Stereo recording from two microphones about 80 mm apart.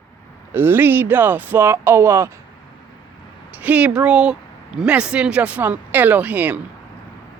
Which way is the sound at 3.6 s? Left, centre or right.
Centre.